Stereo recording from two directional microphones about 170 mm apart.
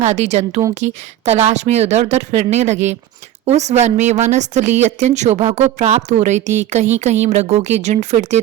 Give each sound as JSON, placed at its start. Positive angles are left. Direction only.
{"t": 0.0, "sound": "a woman's voice", "side_deg": -40}